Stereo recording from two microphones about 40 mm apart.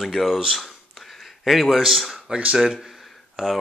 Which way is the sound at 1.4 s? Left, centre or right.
Centre.